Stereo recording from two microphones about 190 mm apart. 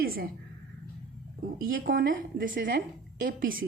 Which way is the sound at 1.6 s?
50° right (ahead or behind).